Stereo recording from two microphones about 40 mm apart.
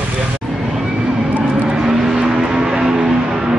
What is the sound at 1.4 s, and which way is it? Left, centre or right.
Vehicle, centre.